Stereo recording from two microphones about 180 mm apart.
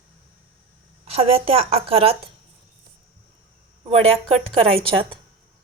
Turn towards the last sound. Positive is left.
turn(degrees=-30)  # may be behind; listen again after turning